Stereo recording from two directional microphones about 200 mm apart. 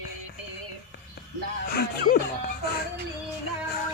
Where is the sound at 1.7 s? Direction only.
50° left (ahead or behind).